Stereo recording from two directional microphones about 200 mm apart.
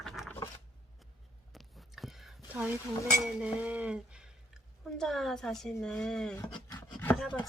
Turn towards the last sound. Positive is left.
turn(degrees=5)  # may be behind; listen again after turning